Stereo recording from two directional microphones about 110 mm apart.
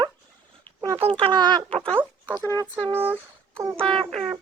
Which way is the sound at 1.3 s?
40° right (ahead or behind).